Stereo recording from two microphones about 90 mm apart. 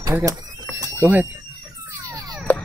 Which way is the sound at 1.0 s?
20° right (ahead or behind).